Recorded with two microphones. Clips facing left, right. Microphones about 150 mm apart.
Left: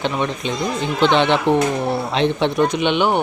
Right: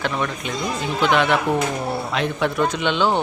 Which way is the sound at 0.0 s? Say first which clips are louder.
Left 3 dB; 20° left (ahead or behind).